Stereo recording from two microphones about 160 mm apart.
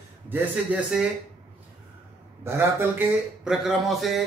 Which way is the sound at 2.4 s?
15° right (ahead or behind).